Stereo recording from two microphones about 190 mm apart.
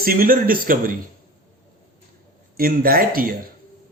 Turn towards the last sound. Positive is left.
turn(degrees=-50)  # may be behind; listen again after turning